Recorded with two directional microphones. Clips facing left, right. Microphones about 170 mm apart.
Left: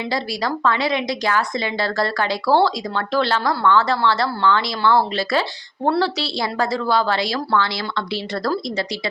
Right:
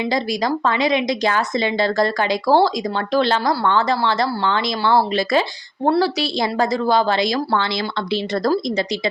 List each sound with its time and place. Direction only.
0.1 s a woman's voice: 20° right (ahead or behind)